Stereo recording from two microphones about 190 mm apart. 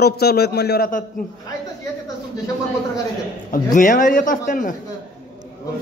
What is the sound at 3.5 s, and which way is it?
Speech, 45° left (ahead or behind).